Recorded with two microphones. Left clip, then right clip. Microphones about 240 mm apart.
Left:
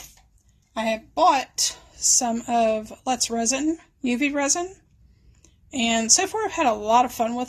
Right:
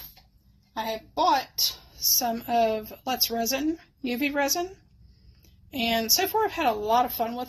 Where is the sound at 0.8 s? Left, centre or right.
Left.